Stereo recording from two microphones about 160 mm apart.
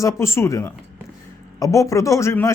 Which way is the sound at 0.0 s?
20° left (ahead or behind).